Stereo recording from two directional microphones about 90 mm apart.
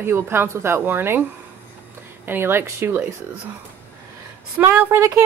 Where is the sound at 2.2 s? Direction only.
25° right (ahead or behind).